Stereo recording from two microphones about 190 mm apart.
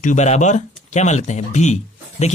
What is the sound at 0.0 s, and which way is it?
Speech, 40° left (ahead or behind).